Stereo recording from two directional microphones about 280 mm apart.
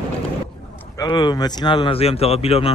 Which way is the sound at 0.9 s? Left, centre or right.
Centre.